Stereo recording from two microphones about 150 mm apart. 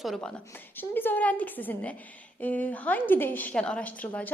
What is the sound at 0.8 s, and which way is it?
A woman's voice, 15° left (ahead or behind).